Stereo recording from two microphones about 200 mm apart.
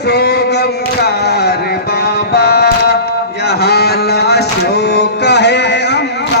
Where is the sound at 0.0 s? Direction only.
55° left (ahead or behind).